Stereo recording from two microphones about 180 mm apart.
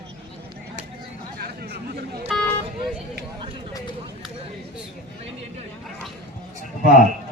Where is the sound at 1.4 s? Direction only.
60° right (ahead or behind).